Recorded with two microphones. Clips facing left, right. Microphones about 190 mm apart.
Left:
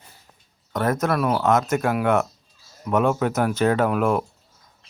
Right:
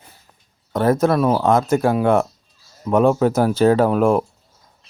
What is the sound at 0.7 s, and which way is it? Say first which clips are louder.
Speech: right 6 dB; 30° right (ahead or behind).